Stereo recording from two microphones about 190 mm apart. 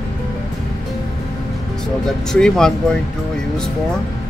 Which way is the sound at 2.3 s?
5° left (ahead or behind).